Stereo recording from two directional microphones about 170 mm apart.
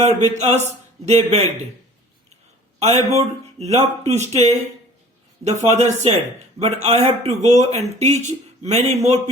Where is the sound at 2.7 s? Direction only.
40° right (ahead or behind).